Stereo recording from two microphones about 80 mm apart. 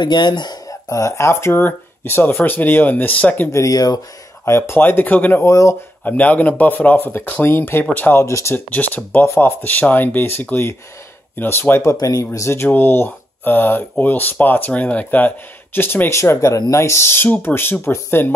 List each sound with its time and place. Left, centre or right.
0.0 s speech: left
0.7 s speech: left; by 3.4 s centre
3.5 s speech: left
4.5 s speech: left
5.4 s speech: left
6.0 s speech: centre
8.2 s speech: left
8.5 s speech: left